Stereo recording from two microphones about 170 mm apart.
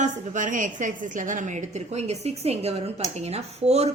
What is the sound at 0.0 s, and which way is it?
A woman's voice, 50° right (ahead or behind).